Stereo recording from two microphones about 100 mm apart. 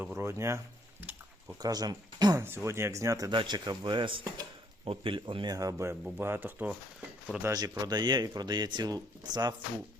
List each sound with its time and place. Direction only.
0.0 s speech: 25° right (ahead or behind)
1.0 s a sound: 15° right (ahead or behind)
1.6 s speech: 40° right (ahead or behind)
2.4 s speech: 25° right (ahead or behind)
3.2 s speech: 50° right (ahead or behind); by 6.7 s 20° right (ahead or behind)
7.3 s speech: centre (ahead or behind)
7.8 s speech: 45° right (ahead or behind)